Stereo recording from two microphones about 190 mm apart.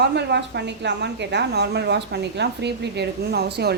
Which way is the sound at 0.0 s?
65° right (ahead or behind).